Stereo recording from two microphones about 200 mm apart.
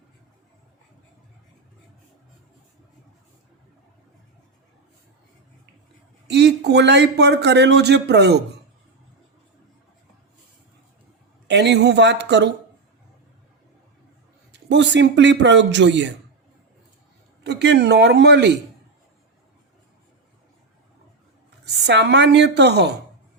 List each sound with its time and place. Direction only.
6.2 s a man's voice: 60° right (ahead or behind)
11.4 s a man's voice: 60° right (ahead or behind)
14.5 s a man's voice: 60° right (ahead or behind)
17.4 s a man's voice: 60° right (ahead or behind)
21.8 s a man's voice: 60° right (ahead or behind)